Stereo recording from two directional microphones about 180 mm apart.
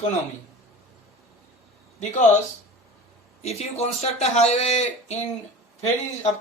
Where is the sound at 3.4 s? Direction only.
35° left (ahead or behind).